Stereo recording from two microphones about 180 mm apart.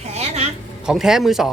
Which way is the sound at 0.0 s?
35° right (ahead or behind).